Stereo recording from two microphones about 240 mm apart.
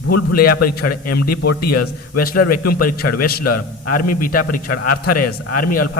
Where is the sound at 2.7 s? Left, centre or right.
Left.